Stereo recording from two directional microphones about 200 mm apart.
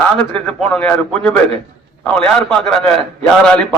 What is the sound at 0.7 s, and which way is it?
A man's voice, 5° left (ahead or behind).